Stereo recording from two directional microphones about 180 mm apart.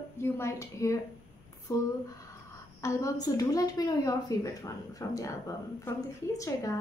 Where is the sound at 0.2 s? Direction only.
15° left (ahead or behind).